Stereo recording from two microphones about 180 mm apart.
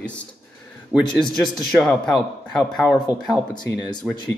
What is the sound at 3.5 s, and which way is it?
Speech, 25° left (ahead or behind).